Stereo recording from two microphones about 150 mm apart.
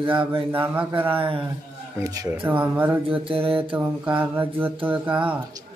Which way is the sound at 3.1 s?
40° right (ahead or behind).